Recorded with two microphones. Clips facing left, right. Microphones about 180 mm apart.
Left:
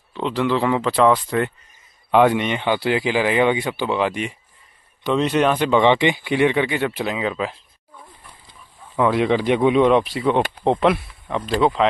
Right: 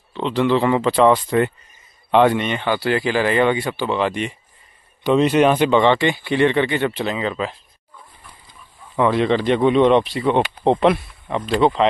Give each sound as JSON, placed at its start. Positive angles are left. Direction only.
{"t": 0.1, "sound": "a man's voice", "side_deg": 5}
{"t": 2.4, "sound": "speech", "side_deg": 15}
{"t": 5.0, "sound": "speech", "side_deg": -5}
{"t": 5.8, "sound": "speech", "side_deg": 15}
{"t": 8.9, "sound": "speech", "side_deg": 5}